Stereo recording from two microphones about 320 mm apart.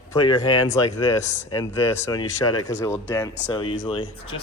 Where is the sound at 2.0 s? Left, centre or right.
Centre.